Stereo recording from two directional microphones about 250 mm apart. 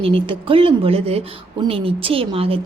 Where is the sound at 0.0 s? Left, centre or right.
Right.